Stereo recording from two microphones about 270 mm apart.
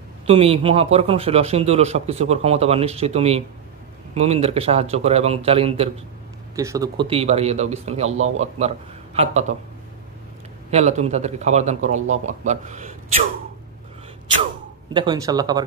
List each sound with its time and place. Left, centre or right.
0.3 s a man's voice: right
10.7 s a man's voice: right
15.0 s speech: centre